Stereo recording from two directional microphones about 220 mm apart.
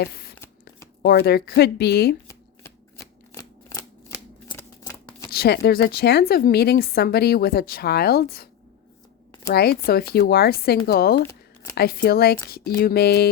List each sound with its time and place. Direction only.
0.0 s shuffling cards: 45° left (ahead or behind)
1.0 s speech: 45° left (ahead or behind)
2.2 s shuffling cards: 15° left (ahead or behind)
4.5 s scissors: 15° left (ahead or behind)
5.3 s speech: 45° left (ahead or behind)
9.5 s speech: 45° left (ahead or behind)